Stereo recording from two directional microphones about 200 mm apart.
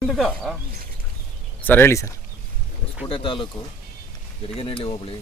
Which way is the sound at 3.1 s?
25° left (ahead or behind).